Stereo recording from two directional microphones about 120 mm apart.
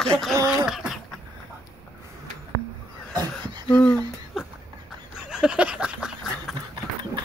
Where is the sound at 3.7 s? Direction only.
10° left (ahead or behind).